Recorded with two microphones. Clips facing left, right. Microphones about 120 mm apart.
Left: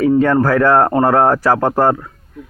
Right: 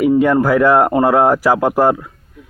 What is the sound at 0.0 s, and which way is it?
Speech, 15° right (ahead or behind).